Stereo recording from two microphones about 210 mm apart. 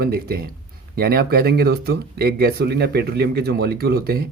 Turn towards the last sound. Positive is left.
turn(degrees=-45)  # may be behind; listen again after turning